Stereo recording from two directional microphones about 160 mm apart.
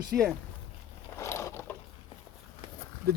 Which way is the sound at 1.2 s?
15° left (ahead or behind).